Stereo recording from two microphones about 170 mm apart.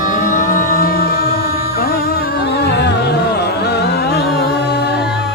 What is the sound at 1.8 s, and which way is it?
Music, 65° left (ahead or behind).